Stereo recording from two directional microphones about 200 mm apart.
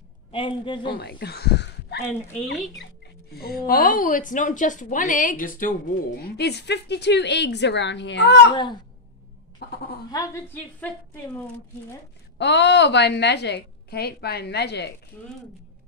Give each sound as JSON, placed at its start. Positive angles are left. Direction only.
{"t": 0.3, "sound": "a man's voice", "side_deg": 25}
{"t": 0.9, "sound": "speech", "side_deg": 55}
{"t": 3.3, "sound": "a woman's voice", "side_deg": 50}
{"t": 10.1, "sound": "a woman's voice", "side_deg": 15}
{"t": 12.4, "sound": "a woman's voice", "side_deg": 60}